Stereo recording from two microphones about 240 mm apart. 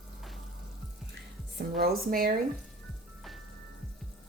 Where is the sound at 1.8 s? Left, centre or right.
Right.